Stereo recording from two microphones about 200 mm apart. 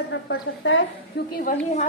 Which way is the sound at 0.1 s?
65° left (ahead or behind).